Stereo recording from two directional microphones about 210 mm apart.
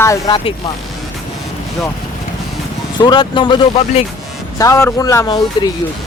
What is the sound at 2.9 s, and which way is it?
Speech, 20° left (ahead or behind).